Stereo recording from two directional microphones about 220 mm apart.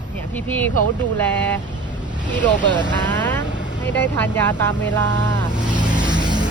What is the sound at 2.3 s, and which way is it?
Speech, 20° right (ahead or behind).